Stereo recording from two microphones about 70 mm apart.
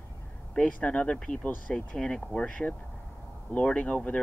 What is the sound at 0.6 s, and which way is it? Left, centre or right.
Speech, centre.